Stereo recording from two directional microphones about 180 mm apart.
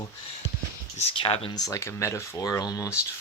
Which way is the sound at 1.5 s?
20° left (ahead or behind).